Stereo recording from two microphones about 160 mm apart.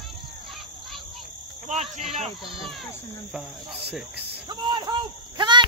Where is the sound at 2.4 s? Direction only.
Centre (ahead or behind).